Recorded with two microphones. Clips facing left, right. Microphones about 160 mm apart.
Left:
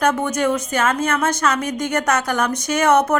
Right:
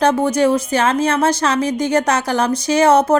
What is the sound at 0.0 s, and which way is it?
A woman's voice, 30° right (ahead or behind).